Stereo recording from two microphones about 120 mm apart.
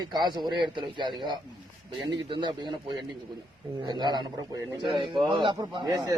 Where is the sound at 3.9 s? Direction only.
35° right (ahead or behind).